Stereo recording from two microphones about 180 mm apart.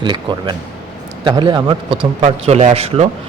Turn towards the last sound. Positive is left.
turn(degrees=-35)  # may be behind; listen again after turning